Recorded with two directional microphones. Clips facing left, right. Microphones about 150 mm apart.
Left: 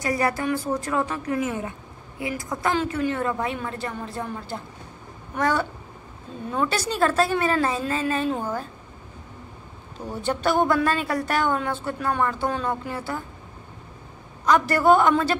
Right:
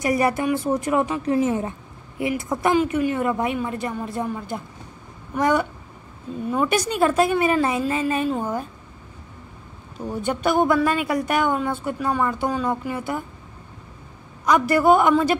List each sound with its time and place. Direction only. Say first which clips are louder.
0.0 s speech: right 3 dB; 20° right (ahead or behind)
2.7 s a woman's voice: right 4 dB; 10° right (ahead or behind)
10.0 s a woman's voice: right 2 dB; 10° right (ahead or behind)
14.4 s a woman's voice: right 2 dB; 10° right (ahead or behind)